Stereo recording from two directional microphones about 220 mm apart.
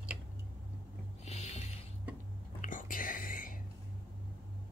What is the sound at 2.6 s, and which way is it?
Whispering, 35° left (ahead or behind).